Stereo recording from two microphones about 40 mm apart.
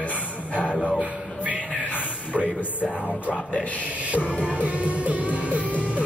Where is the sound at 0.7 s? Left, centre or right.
Centre.